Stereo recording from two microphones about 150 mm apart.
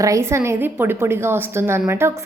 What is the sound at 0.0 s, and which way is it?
A woman's voice, 20° right (ahead or behind).